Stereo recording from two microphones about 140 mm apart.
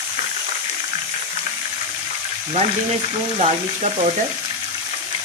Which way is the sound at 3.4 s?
50° right (ahead or behind).